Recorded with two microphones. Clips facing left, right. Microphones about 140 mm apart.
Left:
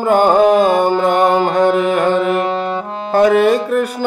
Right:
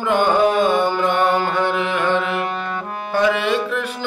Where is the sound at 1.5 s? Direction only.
45° left (ahead or behind).